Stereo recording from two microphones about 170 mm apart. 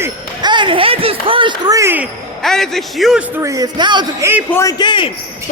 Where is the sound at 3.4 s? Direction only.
20° right (ahead or behind).